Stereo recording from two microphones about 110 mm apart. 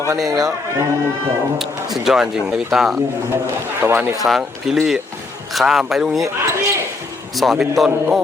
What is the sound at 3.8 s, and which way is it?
Speech, 20° right (ahead or behind).